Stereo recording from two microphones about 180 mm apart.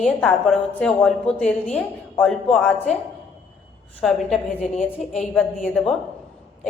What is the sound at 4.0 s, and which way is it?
A woman's voice, 5° left (ahead or behind).